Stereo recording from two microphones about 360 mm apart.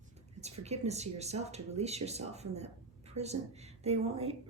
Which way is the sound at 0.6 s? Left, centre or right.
Centre.